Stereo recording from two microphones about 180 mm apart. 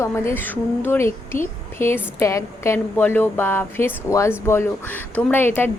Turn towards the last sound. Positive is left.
turn(degrees=10)  # may be behind; listen again after turning